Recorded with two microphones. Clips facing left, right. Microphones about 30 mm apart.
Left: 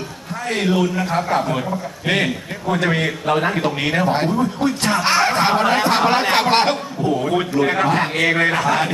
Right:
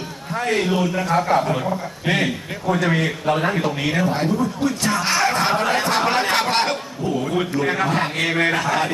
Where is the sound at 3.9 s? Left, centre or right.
Left.